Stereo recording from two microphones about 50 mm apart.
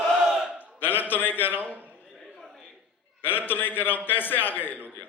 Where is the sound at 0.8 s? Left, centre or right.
Left.